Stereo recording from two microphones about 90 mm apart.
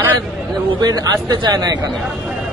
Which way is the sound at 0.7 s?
50° right (ahead or behind).